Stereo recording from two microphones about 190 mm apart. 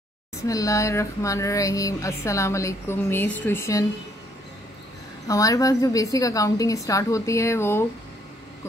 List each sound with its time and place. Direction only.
0.4 s speech: 15° left (ahead or behind)
5.3 s speech: 20° left (ahead or behind)